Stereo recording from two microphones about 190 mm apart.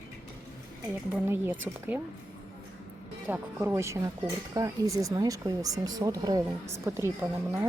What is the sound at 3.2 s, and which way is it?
Speech, 10° right (ahead or behind).